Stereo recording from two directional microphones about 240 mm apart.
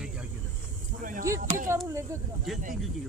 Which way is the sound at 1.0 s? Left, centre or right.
Right.